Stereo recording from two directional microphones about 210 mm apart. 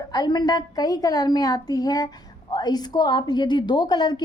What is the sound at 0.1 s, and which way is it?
A woman's voice, 20° left (ahead or behind).